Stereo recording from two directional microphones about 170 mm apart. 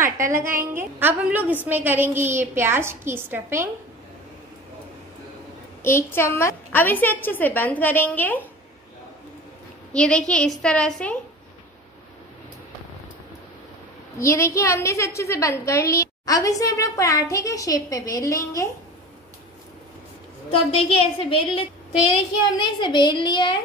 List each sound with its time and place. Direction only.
0.0 s a woman's voice: 15° right (ahead or behind)
5.8 s a woman's voice: 15° left (ahead or behind)
9.9 s a woman's voice: 5° left (ahead or behind)
14.2 s a woman's voice: 15° left (ahead or behind)
20.7 s a woman's voice: 35° left (ahead or behind)